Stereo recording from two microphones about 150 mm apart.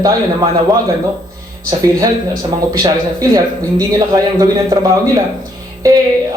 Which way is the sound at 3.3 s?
25° right (ahead or behind).